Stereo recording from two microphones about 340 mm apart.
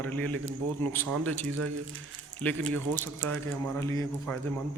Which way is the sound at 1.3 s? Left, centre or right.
Right.